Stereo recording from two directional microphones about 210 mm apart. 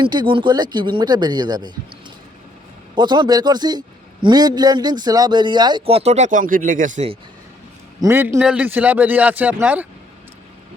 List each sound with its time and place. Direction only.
0.0 s a man's voice: 20° right (ahead or behind)
2.9 s a man's voice: 20° right (ahead or behind)
8.0 s speech: 10° right (ahead or behind)